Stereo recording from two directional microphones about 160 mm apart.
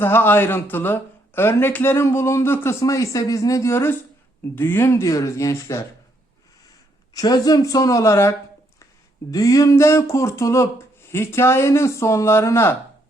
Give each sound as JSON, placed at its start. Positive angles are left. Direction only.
{"t": 0.0, "sound": "speech", "side_deg": 15}
{"t": 7.1, "sound": "speech", "side_deg": 25}